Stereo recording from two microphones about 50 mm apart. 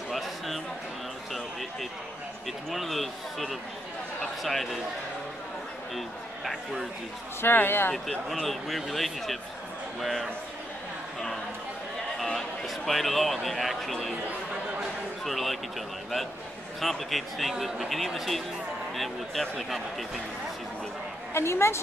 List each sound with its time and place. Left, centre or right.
0.1 s a sound: centre
2.4 s speech: centre
5.9 s a man's voice: centre
7.4 s speech: left
7.9 s speech: centre
12.4 s a man's voice: centre
15.2 s speech: centre
16.8 s speech: centre
21.3 s a woman's voice: left